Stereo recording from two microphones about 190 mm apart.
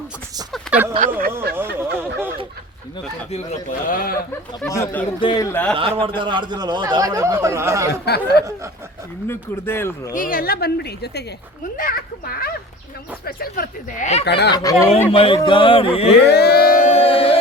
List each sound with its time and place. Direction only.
0.5 s a sound: 5° right (ahead or behind)
1.5 s speech: 10° right (ahead or behind)
3.3 s speech: 45° left (ahead or behind)
4.3 s speech: 15° left (ahead or behind)
6.0 s speech: 25° right (ahead or behind)
8.0 s a woman's voice: 60° left (ahead or behind)
9.2 s speech: 10° left (ahead or behind)
10.2 s a woman's voice: 50° left (ahead or behind)
14.3 s a woman's voice: 60° left (ahead or behind)
14.5 s speech: 20° left (ahead or behind)
15.1 s speech: 30° left (ahead or behind)
16.1 s speech: 60° left (ahead or behind); by 17.3 s 30° left (ahead or behind)